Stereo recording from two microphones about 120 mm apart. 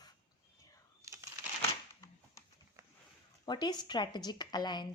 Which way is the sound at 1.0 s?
25° right (ahead or behind).